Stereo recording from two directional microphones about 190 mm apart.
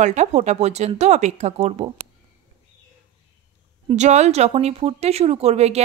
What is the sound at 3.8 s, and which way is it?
Speech, 40° right (ahead or behind).